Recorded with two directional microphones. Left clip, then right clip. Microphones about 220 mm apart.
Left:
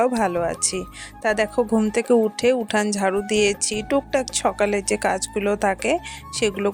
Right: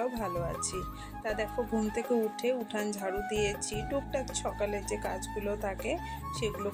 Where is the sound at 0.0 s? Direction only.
45° left (ahead or behind).